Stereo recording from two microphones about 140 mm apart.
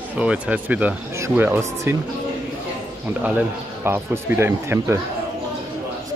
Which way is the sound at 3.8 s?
15° right (ahead or behind).